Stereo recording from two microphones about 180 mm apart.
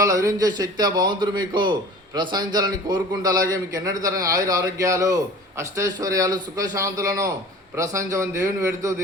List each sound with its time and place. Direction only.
0.0 s a man's voice: 20° right (ahead or behind)